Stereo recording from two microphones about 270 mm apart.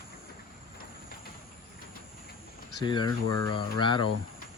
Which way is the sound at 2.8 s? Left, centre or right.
Centre.